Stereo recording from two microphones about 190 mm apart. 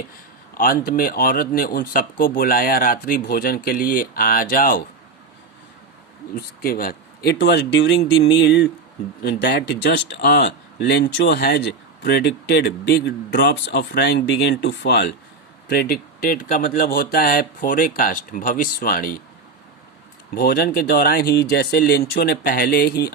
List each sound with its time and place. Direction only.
0.5 s speech: 50° left (ahead or behind)
6.3 s speech: 50° left (ahead or behind)
20.3 s speech: 55° left (ahead or behind)